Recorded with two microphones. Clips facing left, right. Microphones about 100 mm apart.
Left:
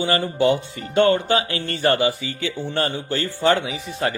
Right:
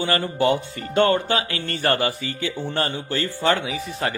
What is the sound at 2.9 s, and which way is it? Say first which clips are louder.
Speech: left 1 dB; 30° left (ahead or behind).